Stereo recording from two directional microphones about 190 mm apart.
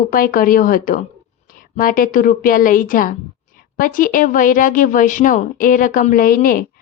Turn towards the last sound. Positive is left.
turn(degrees=50)  # may be behind; listen again after turning